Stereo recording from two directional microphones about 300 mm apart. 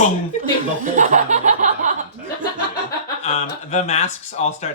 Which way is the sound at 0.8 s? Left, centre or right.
Right.